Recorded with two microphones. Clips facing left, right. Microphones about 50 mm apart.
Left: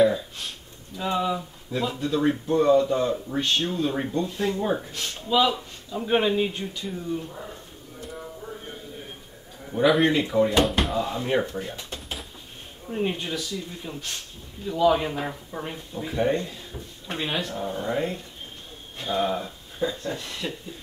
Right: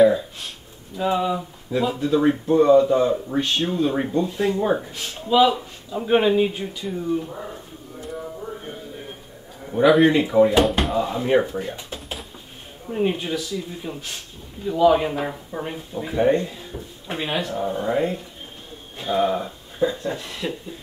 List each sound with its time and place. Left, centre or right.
0.0 s a sound: centre
0.9 s speech: centre
7.2 s speech: centre
8.4 s music: centre
9.7 s speech: centre